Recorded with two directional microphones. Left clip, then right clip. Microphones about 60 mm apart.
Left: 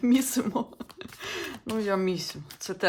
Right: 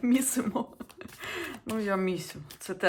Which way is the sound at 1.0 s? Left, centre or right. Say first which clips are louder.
Left 2 dB; centre.